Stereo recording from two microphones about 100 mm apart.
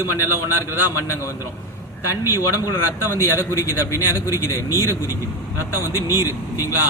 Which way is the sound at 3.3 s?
25° right (ahead or behind).